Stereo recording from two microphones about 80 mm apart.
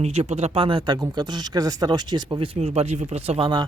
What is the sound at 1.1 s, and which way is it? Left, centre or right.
Speech, right.